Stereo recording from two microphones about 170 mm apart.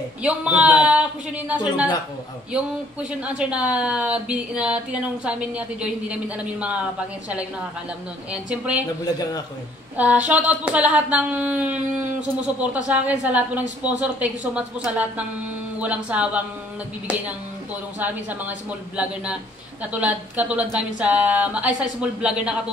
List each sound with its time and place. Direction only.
0.2 s a woman's voice: 5° right (ahead or behind)
9.0 s a man's voice: 20° left (ahead or behind)
9.9 s a woman's voice: 10° right (ahead or behind)
17.9 s a woman's voice: 10° right (ahead or behind)